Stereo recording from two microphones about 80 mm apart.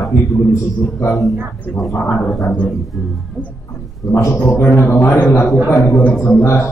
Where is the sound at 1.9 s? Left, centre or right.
Left.